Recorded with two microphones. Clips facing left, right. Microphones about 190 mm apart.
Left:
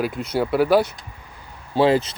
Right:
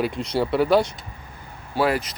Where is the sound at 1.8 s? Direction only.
25° left (ahead or behind).